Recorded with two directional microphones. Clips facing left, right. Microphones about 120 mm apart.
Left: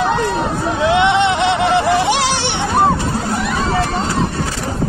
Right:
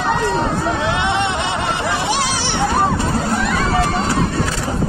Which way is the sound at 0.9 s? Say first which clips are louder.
Left 6 dB; 90° left.